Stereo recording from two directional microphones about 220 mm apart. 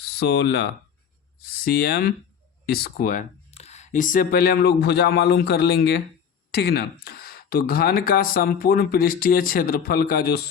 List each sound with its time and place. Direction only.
0.2 s speech: 50° left (ahead or behind)